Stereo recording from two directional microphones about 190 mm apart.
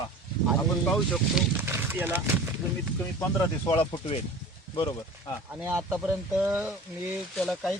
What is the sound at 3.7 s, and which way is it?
Speech, 25° left (ahead or behind).